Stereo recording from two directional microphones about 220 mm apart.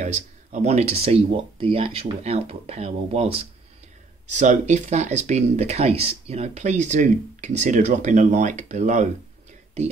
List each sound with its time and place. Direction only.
0.0 s speech: 30° right (ahead or behind)